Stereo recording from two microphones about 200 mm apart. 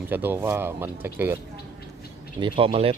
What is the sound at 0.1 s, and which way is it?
Speech, 10° right (ahead or behind).